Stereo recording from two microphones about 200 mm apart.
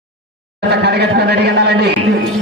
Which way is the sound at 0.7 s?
55° right (ahead or behind).